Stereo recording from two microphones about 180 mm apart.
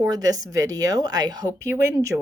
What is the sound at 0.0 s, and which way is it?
Speech, 20° right (ahead or behind).